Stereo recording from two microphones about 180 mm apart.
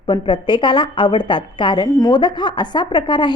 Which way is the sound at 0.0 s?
25° left (ahead or behind).